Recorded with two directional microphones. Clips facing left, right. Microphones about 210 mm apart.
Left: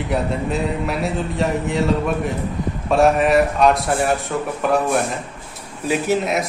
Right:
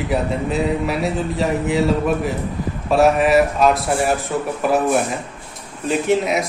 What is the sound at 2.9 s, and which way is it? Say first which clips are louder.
A man's voice: right 1 dB; centre (ahead or behind).